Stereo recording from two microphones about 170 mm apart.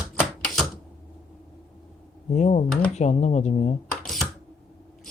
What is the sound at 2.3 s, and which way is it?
Speech, 45° left (ahead or behind).